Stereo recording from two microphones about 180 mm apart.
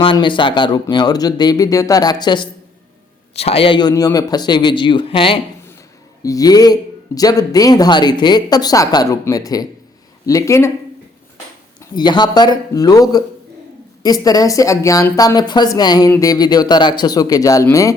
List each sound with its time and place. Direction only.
0.0 s speech: 25° left (ahead or behind)
6.2 s speech: 20° left (ahead or behind)
11.8 s speech: 25° left (ahead or behind)